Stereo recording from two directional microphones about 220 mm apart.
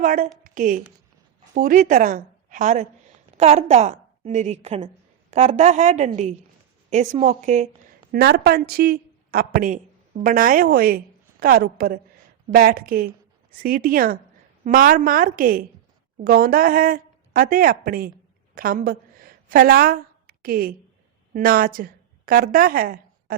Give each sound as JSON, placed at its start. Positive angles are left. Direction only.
{"t": 0.0, "sound": "speech", "side_deg": -40}
{"t": 0.4, "sound": "a sound", "side_deg": -35}
{"t": 1.5, "sound": "a woman's voice", "side_deg": -35}
{"t": 8.1, "sound": "speech", "side_deg": -45}
{"t": 18.5, "sound": "a sound", "side_deg": -40}
{"t": 21.3, "sound": "speech", "side_deg": -40}